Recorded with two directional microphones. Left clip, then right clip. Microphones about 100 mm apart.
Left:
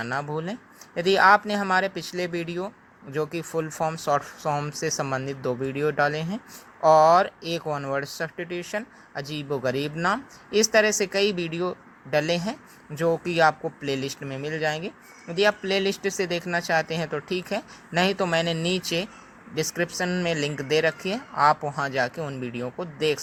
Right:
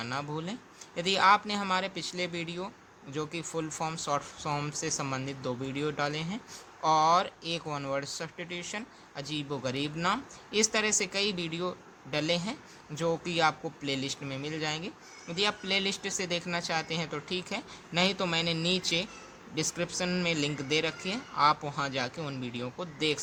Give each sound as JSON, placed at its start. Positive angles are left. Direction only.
{"t": 0.0, "sound": "speech", "side_deg": 55}
{"t": 20.3, "sound": "speech", "side_deg": 55}